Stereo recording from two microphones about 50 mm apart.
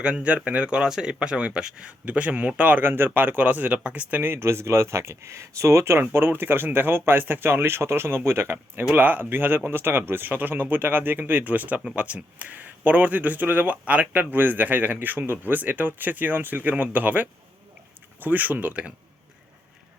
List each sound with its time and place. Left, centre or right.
0.0 s speech: right
2.8 s speech: right
4.2 s speech: right
8.9 s speech: right